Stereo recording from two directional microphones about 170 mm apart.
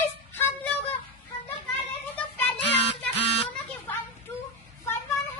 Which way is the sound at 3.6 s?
10° left (ahead or behind).